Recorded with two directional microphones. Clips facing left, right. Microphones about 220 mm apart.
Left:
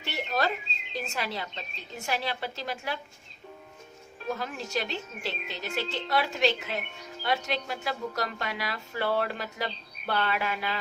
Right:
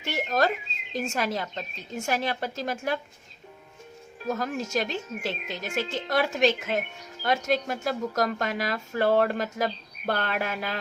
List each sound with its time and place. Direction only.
0.0 s bird: 45° right (ahead or behind)
0.9 s speech: 45° right (ahead or behind)
4.3 s speech: 45° right (ahead or behind)